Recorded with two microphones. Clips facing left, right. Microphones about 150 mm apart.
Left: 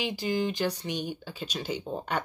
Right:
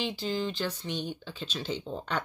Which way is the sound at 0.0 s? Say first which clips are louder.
Left 2 dB; 15° left (ahead or behind).